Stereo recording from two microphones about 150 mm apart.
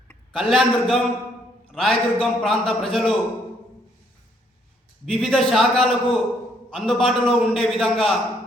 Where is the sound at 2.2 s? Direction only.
5° left (ahead or behind).